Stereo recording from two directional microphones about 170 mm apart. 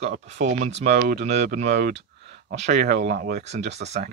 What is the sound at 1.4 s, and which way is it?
Speech, 45° right (ahead or behind).